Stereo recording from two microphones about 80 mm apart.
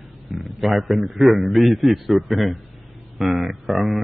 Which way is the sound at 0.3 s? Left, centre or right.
Centre.